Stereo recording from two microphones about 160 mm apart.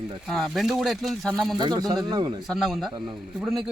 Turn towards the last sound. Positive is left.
turn(degrees=0)  # may be behind; listen again after turning